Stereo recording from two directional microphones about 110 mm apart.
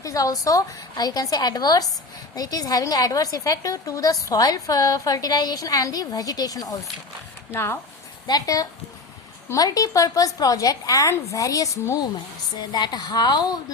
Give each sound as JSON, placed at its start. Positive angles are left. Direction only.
{"t": 0.0, "sound": "a woman's voice", "side_deg": 30}
{"t": 7.5, "sound": "speech", "side_deg": 20}
{"t": 8.3, "sound": "a woman's voice", "side_deg": 35}
{"t": 12.5, "sound": "a woman's voice", "side_deg": 40}